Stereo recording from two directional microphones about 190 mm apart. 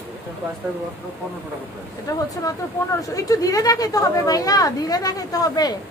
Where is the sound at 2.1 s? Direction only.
20° left (ahead or behind).